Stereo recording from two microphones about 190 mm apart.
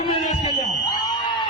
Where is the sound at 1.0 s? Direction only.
20° left (ahead or behind).